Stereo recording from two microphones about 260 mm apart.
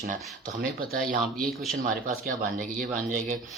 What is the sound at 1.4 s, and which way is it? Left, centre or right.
Speech, centre.